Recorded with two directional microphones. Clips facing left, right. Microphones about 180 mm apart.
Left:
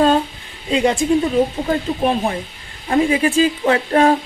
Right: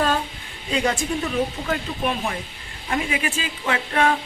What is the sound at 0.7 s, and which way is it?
Speech, 25° left (ahead or behind).